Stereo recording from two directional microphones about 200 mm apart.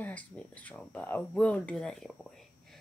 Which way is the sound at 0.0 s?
5° left (ahead or behind).